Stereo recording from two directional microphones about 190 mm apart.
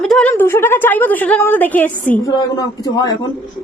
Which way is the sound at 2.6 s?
20° left (ahead or behind).